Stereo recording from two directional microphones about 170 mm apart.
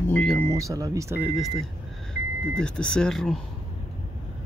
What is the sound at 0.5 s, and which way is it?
Speech, 20° right (ahead or behind).